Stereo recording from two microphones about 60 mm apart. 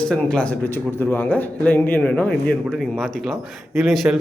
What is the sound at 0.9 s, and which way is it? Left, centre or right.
A man's voice, left.